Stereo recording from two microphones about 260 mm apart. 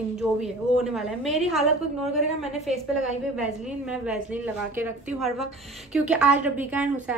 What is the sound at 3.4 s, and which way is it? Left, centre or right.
A woman's voice, centre.